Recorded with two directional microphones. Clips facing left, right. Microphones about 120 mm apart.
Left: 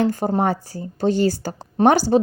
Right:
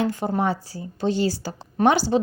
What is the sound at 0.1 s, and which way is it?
A woman's voice, 40° left (ahead or behind).